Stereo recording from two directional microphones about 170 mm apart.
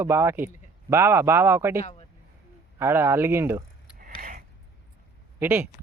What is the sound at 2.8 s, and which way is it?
Speech, 15° right (ahead or behind).